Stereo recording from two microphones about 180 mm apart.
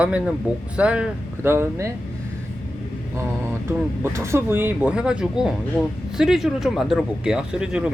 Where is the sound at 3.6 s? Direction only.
15° right (ahead or behind).